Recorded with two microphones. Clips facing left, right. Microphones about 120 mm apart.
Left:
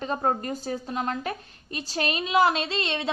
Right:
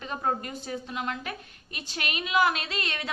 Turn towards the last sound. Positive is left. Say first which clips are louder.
# left 5 dB
turn(degrees=25)  # may be behind; listen again after turning